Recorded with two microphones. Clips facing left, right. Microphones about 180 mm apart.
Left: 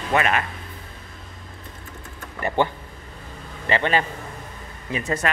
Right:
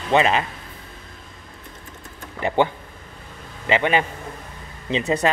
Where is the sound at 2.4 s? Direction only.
15° right (ahead or behind).